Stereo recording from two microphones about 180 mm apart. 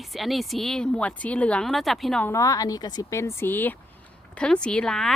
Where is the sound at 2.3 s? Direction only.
20° left (ahead or behind).